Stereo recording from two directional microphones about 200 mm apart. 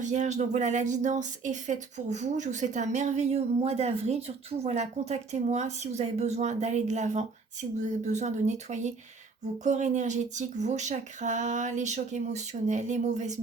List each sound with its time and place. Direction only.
0.0 s speech: 35° right (ahead or behind)